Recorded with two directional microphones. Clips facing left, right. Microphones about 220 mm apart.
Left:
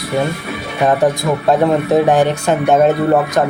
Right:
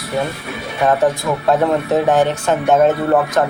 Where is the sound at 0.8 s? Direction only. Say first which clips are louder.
Left 2 dB; 15° left (ahead or behind).